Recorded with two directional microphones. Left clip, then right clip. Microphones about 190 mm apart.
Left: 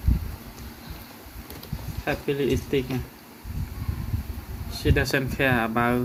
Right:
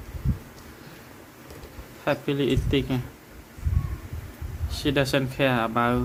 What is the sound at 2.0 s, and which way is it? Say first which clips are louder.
Speech: right 1 dB; 25° right (ahead or behind).